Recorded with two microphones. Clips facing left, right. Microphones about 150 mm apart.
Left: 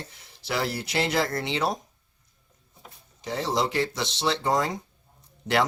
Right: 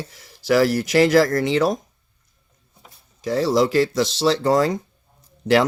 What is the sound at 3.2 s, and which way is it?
Speech, 90° right.